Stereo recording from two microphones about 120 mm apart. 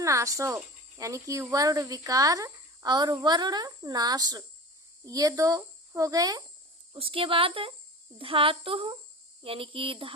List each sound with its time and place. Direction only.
0.0 s speech: 25° right (ahead or behind)
6.9 s speech: 50° right (ahead or behind)